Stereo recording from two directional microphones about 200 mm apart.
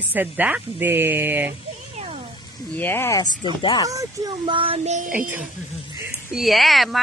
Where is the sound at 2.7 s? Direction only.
10° left (ahead or behind).